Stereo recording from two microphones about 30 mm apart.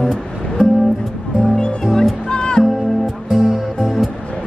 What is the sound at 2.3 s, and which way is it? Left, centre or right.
Music, left.